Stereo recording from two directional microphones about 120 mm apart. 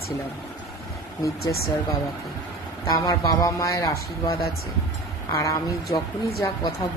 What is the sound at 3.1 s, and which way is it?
A woman's voice, 30° left (ahead or behind).